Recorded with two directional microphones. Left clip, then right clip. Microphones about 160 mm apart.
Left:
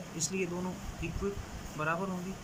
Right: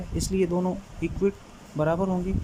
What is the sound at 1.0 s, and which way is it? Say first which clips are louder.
Speech: right 11 dB; 50° right (ahead or behind).